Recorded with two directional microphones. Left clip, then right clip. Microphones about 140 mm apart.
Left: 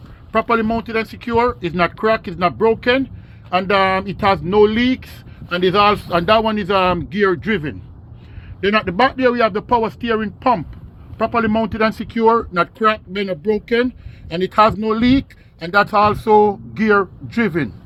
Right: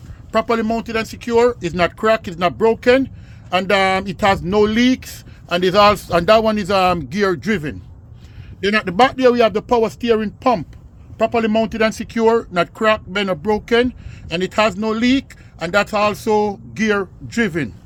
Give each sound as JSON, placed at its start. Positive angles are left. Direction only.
{"t": 0.3, "sound": "speech", "side_deg": -65}
{"t": 8.6, "sound": "speech", "side_deg": -65}
{"t": 11.2, "sound": "speech", "side_deg": -60}